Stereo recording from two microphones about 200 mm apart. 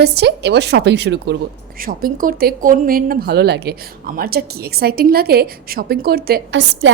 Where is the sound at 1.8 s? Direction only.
45° right (ahead or behind).